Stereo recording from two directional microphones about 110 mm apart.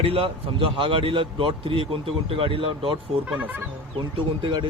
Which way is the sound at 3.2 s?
15° right (ahead or behind).